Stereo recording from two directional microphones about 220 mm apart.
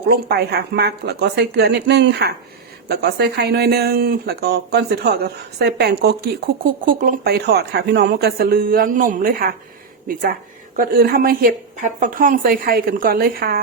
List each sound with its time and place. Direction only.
0.1 s a woman's voice: 45° right (ahead or behind)